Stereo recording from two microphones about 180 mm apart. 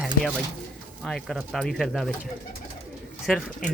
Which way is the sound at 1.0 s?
Centre (ahead or behind).